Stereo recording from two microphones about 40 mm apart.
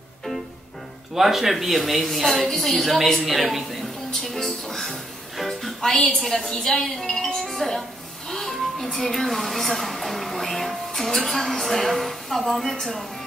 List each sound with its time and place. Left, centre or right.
1.1 s a woman's voice: centre